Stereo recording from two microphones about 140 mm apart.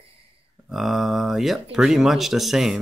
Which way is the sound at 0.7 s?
Centre (ahead or behind).